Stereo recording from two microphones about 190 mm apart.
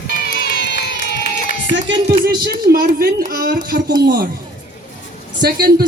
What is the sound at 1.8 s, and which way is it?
A man's voice, 55° right (ahead or behind).